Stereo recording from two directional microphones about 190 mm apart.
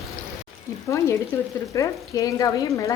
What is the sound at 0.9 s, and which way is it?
Speech, 15° left (ahead or behind).